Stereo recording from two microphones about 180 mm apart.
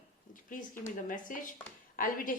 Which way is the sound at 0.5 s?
50° left (ahead or behind).